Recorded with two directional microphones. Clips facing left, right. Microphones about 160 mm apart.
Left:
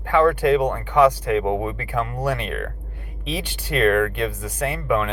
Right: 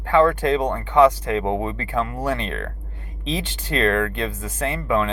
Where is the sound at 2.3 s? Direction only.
25° right (ahead or behind).